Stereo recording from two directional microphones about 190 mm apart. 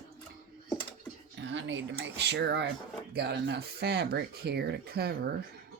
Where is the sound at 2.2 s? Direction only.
65° right (ahead or behind).